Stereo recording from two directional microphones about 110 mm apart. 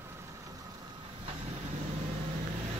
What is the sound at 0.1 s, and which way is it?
Vehicle, 25° right (ahead or behind).